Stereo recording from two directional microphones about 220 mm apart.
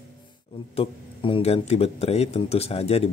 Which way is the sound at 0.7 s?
25° left (ahead or behind).